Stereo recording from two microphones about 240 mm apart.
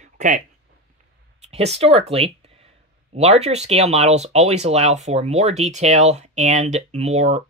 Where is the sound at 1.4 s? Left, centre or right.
Right.